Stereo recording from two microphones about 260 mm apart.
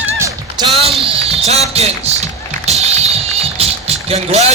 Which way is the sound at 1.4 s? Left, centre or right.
Right.